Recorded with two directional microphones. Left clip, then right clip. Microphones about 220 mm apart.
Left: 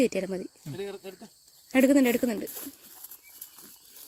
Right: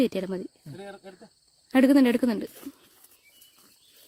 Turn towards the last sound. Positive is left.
turn(degrees=-25)  # may be behind; listen again after turning